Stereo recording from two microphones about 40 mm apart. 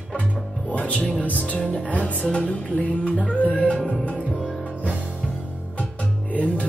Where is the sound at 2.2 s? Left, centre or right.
Left.